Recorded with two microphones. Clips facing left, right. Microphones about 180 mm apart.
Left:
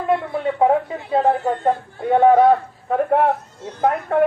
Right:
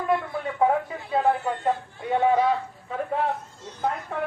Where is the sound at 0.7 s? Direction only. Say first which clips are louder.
Left 6 dB; 30° left (ahead or behind).